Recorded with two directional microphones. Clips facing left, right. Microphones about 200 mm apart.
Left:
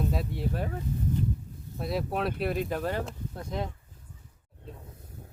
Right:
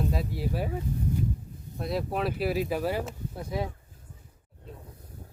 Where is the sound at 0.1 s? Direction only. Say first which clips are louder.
Right 1 dB; centre (ahead or behind).